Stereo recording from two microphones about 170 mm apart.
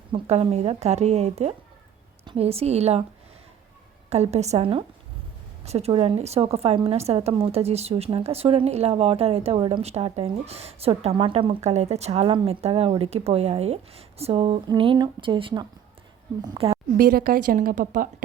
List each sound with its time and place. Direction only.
0.1 s a woman's voice: 40° right (ahead or behind)
4.1 s a woman's voice: 40° right (ahead or behind)
17.0 s a woman's voice: 60° right (ahead or behind)